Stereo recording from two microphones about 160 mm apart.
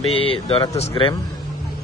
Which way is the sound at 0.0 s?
35° left (ahead or behind).